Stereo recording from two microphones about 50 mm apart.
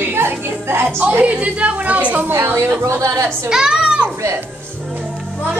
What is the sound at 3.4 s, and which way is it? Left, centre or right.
Speech, centre.